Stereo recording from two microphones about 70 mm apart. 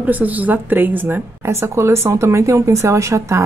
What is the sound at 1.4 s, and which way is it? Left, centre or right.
Speech, right.